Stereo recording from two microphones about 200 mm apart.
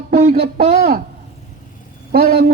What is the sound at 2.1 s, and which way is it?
Speech, 45° right (ahead or behind).